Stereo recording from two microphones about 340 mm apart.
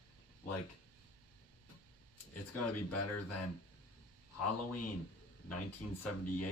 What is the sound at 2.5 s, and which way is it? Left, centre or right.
Speech, left.